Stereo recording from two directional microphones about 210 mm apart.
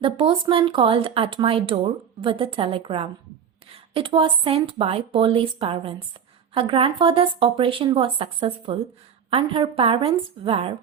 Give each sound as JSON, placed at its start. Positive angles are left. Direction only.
{"t": 0.0, "sound": "speech", "side_deg": -25}